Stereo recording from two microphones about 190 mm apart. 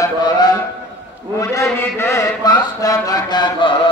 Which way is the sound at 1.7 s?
15° left (ahead or behind).